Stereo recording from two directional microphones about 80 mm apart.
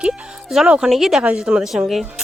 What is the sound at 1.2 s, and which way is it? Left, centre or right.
Speech, centre.